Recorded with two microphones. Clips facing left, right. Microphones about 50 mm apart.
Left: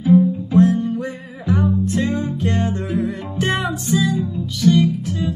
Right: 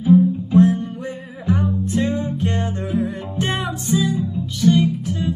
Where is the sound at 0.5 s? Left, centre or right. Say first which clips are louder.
Left 1 dB; right.